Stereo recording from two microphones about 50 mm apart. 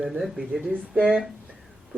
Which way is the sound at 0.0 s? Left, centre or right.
Centre.